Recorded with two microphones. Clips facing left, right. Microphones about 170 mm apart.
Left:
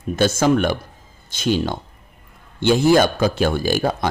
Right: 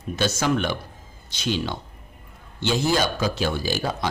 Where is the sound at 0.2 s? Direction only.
50° left (ahead or behind).